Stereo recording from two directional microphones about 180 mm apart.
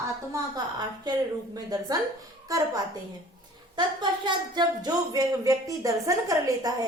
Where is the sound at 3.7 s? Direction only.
25° right (ahead or behind).